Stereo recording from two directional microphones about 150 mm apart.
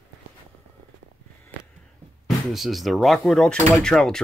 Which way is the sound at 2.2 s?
Centre (ahead or behind).